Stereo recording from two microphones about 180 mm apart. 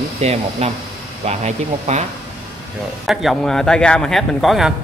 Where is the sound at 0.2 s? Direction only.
35° right (ahead or behind).